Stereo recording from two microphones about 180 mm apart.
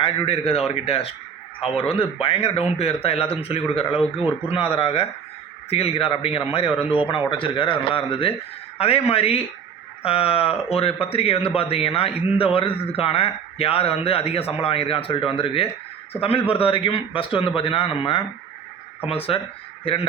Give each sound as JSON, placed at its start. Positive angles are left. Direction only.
{"t": 0.0, "sound": "a man's voice", "side_deg": 35}